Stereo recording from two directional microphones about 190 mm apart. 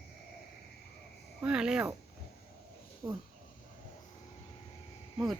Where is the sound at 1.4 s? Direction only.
5° right (ahead or behind).